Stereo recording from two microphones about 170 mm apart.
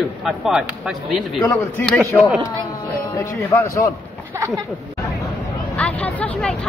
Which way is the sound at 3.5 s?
15° left (ahead or behind).